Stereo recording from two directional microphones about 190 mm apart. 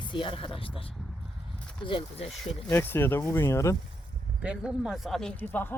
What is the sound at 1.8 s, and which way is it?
Speech, 30° left (ahead or behind).